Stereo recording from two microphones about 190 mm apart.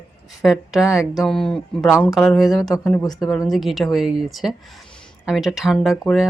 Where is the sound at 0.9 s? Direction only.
15° left (ahead or behind).